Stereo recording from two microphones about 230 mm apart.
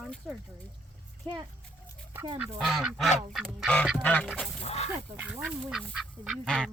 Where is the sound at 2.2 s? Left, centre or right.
Centre.